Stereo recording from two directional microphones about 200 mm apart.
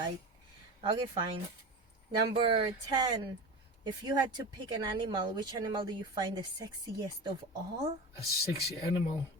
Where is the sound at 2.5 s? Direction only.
20° right (ahead or behind).